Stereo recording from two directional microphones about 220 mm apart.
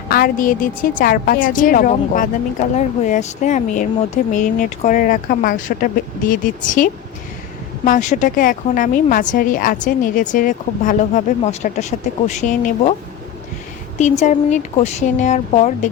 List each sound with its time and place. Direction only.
0.1 s a woman's voice: 40° left (ahead or behind)
14.0 s a woman's voice: 35° left (ahead or behind)